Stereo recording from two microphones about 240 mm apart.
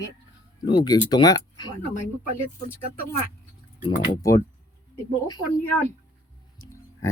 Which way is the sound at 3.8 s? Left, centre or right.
Centre.